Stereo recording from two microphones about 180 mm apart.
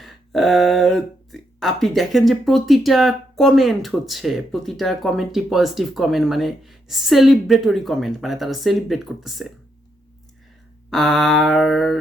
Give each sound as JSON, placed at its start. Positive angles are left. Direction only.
{"t": 0.0, "sound": "speech", "side_deg": 0}
{"t": 10.9, "sound": "speech", "side_deg": 0}